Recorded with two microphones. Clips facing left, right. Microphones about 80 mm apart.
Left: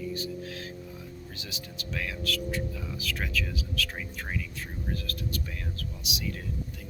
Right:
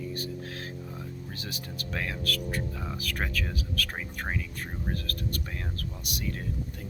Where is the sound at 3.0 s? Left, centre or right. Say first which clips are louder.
Left 1 dB; right.